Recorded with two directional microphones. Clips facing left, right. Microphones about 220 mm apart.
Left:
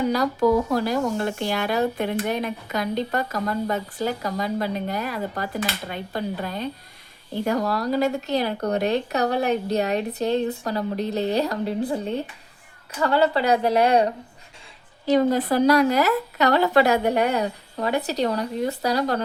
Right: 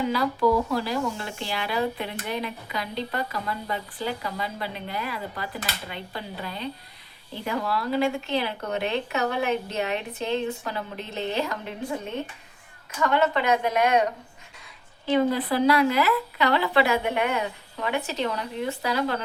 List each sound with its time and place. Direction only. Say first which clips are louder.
0.0 s speech: left 3 dB; 45° left (ahead or behind)